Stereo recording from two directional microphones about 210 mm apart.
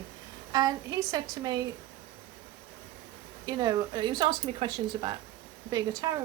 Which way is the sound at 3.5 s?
20° right (ahead or behind).